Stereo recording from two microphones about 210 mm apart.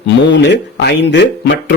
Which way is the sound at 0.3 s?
55° left (ahead or behind).